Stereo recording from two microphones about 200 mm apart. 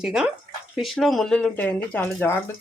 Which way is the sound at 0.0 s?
5° right (ahead or behind).